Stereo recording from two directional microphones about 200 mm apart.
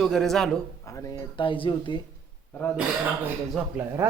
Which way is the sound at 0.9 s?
15° left (ahead or behind).